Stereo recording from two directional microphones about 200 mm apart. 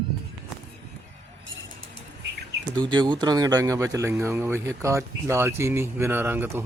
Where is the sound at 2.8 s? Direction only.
20° right (ahead or behind).